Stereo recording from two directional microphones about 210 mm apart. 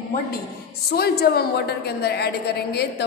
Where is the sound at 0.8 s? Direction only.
50° left (ahead or behind).